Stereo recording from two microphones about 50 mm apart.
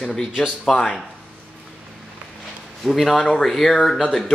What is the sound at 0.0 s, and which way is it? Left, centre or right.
Speech, centre.